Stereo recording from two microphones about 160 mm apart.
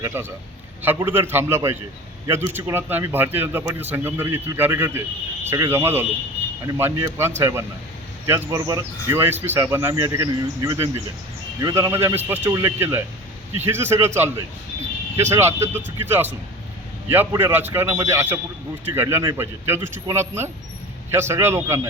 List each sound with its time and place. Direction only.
0.0 s speech: 15° right (ahead or behind)
17.4 s speech: 15° right (ahead or behind)